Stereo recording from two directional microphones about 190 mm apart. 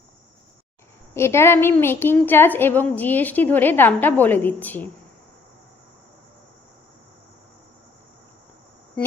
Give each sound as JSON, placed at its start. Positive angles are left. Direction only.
{"t": 1.1, "sound": "a woman's voice", "side_deg": 15}